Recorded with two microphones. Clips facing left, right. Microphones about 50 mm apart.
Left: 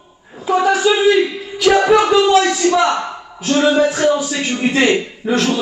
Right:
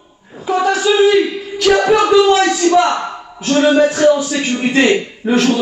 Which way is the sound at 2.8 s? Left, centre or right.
Right.